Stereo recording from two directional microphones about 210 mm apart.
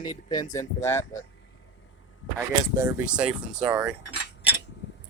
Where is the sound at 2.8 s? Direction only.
5° right (ahead or behind).